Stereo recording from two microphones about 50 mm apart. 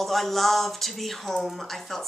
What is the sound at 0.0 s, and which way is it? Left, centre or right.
A woman's voice, centre.